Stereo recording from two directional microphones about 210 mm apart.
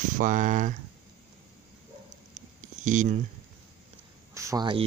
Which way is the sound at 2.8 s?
35° right (ahead or behind).